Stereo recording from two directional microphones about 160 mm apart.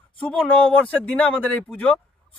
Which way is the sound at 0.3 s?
5° left (ahead or behind).